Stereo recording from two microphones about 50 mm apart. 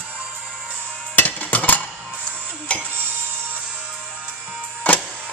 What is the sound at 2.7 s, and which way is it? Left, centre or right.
Music, left.